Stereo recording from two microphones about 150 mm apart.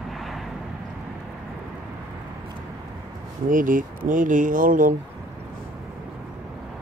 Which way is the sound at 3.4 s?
65° right (ahead or behind).